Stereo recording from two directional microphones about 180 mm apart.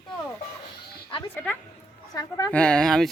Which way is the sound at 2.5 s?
5° left (ahead or behind).